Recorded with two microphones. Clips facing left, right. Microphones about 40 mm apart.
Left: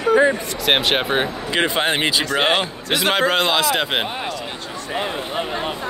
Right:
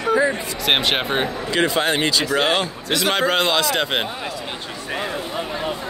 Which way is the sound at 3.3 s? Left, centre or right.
Centre.